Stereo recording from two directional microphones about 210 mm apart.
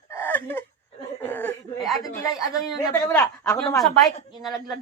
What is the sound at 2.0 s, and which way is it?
A man's voice, 15° left (ahead or behind).